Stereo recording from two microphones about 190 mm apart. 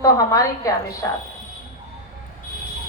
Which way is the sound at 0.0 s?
15° left (ahead or behind).